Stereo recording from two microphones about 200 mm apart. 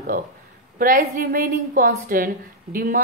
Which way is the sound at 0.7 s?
45° right (ahead or behind).